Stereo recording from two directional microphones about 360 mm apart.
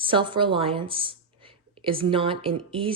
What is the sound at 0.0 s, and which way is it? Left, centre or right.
A woman's voice, centre.